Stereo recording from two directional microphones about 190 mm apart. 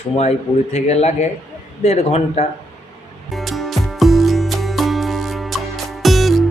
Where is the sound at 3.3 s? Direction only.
Centre (ahead or behind).